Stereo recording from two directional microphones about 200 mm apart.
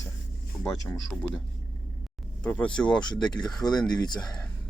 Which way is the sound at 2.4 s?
5° left (ahead or behind).